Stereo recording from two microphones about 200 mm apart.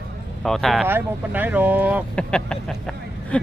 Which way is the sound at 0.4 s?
Centre (ahead or behind).